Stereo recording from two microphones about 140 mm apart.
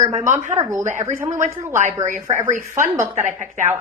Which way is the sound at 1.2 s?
20° right (ahead or behind).